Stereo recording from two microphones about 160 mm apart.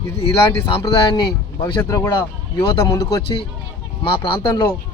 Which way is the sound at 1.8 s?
15° left (ahead or behind).